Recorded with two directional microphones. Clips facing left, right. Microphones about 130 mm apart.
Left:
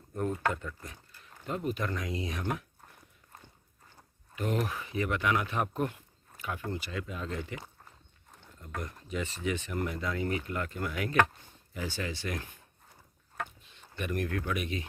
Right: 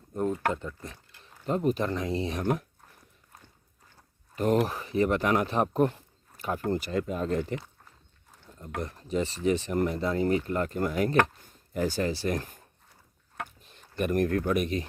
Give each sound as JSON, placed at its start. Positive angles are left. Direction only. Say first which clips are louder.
{"t": 0.1, "sound": "speech", "louder": "right 3 dB", "side_deg": -20}
{"t": 1.5, "sound": "speech", "louder": "right 7 dB", "side_deg": -35}
{"t": 2.4, "sound": "speech", "louder": "right 8 dB", "side_deg": -40}
{"t": 4.4, "sound": "speech", "louder": "right 7 dB", "side_deg": -40}
{"t": 8.8, "sound": "speech", "louder": "right 7 dB", "side_deg": -35}
{"t": 13.3, "sound": "a sound", "louder": "even", "side_deg": -45}